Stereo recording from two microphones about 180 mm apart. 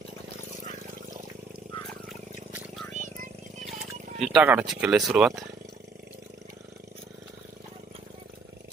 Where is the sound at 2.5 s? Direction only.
5° right (ahead or behind).